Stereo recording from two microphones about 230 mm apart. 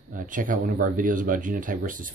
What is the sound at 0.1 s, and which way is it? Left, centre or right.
Speech, right.